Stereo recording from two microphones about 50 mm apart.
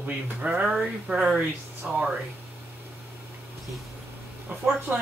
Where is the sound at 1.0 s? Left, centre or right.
Centre.